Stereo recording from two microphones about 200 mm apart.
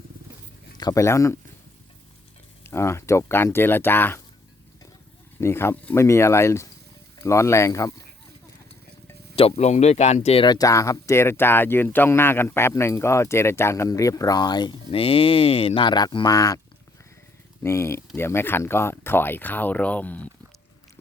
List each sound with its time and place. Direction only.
0.8 s speech: 15° left (ahead or behind)
2.6 s speech: 15° left (ahead or behind)
5.4 s speech: 10° left (ahead or behind)
9.3 s speech: 30° left (ahead or behind)
17.6 s speech: 15° left (ahead or behind)